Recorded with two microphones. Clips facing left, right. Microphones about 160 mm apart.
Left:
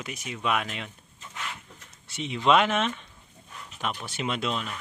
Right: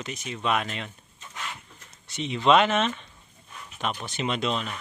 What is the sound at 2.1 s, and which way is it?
Speech, 5° left (ahead or behind).